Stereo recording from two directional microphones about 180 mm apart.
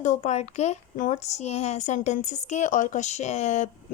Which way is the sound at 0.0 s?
40° left (ahead or behind).